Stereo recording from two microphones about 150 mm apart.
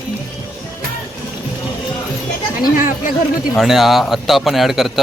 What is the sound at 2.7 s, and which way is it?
Speech, 65° left (ahead or behind).